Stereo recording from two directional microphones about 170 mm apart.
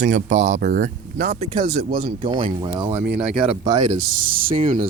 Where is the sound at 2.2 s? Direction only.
30° right (ahead or behind).